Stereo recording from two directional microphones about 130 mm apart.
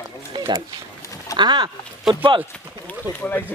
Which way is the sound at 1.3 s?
35° right (ahead or behind).